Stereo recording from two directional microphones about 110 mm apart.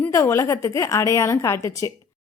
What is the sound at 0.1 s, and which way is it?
Speech, 25° left (ahead or behind).